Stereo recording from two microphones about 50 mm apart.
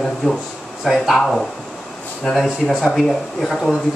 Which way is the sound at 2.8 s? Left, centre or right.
Centre.